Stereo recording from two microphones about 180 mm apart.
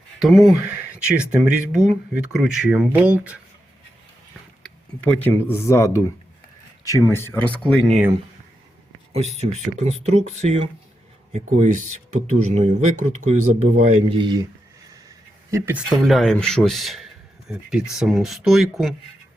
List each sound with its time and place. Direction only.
0.2 s speech: centre (ahead or behind)
4.6 s speech: 5° left (ahead or behind)
7.1 s speech: 10° left (ahead or behind)
9.4 s a man's voice: 35° right (ahead or behind)
15.5 s speech: 10° right (ahead or behind)
16.0 s speech: centre (ahead or behind)